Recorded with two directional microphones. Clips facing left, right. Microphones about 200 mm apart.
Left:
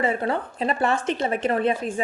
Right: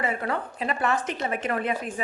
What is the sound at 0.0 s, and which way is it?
Speech, 30° left (ahead or behind).